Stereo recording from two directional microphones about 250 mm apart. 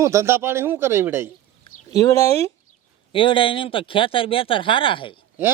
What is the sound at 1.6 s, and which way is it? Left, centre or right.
Speech, centre.